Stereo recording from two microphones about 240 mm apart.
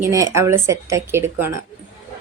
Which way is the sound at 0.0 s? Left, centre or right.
Centre.